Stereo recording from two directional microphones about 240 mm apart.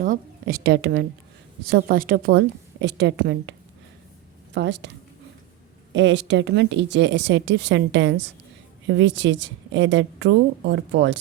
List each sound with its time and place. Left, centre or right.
0.0 s a woman's voice: right
4.5 s a woman's voice: right
5.9 s a woman's voice: right